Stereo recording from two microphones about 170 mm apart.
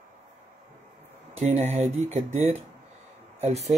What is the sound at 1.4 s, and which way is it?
Speech, 40° right (ahead or behind).